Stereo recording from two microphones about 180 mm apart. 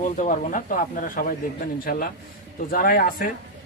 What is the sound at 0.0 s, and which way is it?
A man's voice, 45° left (ahead or behind).